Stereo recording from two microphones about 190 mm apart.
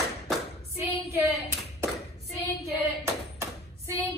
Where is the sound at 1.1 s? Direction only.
15° right (ahead or behind).